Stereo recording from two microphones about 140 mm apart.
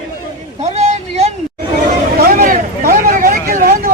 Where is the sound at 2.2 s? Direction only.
90° right.